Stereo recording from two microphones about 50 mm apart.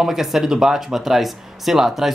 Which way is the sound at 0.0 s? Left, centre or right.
Centre.